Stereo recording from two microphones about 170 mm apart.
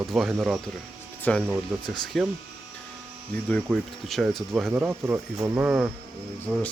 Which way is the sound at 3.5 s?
Centre (ahead or behind).